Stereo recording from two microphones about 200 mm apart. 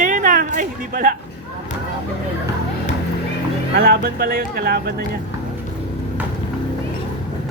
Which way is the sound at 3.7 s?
50° right (ahead or behind).